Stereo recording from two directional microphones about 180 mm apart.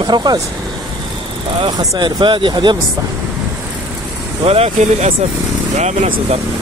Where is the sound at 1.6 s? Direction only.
25° right (ahead or behind).